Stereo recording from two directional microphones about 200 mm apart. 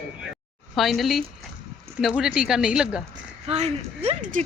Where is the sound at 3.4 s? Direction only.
30° right (ahead or behind).